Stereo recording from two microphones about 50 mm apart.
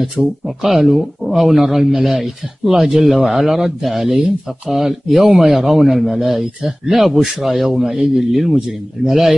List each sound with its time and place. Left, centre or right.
0.2 s speech: left
0.6 s a man's voice: centre
7.8 s speech: centre
8.3 s a man's voice: centre